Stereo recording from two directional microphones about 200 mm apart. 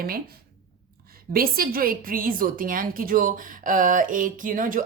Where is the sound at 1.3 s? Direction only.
45° right (ahead or behind).